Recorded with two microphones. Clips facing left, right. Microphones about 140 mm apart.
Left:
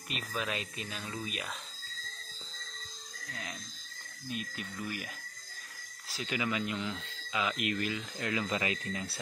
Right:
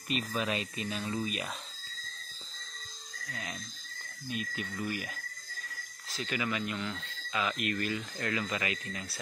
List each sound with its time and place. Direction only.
0.1 s speech: centre (ahead or behind)
3.3 s speech: 5° right (ahead or behind)
6.0 s speech: 15° left (ahead or behind)